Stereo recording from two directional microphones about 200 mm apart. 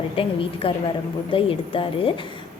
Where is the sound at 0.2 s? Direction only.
25° left (ahead or behind).